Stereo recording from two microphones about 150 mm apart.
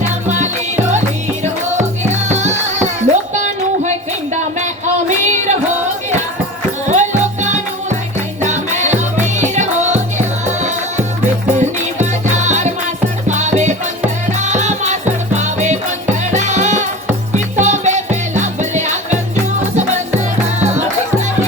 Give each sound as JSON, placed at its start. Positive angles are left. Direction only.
{"t": 0.3, "sound": "music", "side_deg": -50}
{"t": 2.3, "sound": "music", "side_deg": -50}
{"t": 5.0, "sound": "music", "side_deg": -50}
{"t": 6.8, "sound": "music", "side_deg": -55}